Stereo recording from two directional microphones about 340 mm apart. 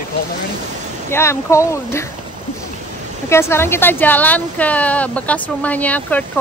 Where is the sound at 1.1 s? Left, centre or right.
Centre.